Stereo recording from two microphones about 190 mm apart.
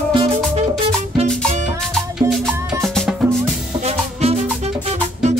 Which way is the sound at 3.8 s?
35° right (ahead or behind).